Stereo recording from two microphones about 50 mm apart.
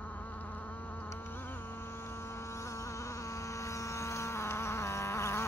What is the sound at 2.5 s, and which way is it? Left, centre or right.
Vehicle, left.